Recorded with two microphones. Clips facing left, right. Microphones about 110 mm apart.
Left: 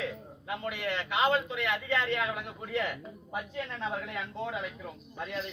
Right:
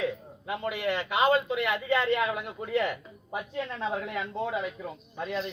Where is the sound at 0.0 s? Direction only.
15° right (ahead or behind).